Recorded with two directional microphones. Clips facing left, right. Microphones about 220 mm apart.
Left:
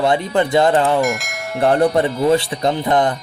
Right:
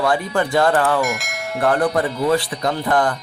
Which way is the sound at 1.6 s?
25° left (ahead or behind).